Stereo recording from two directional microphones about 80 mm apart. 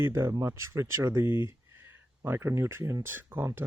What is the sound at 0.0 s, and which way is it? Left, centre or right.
Speech, right.